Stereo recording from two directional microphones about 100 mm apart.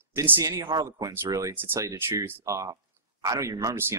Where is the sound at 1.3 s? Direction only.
35° right (ahead or behind).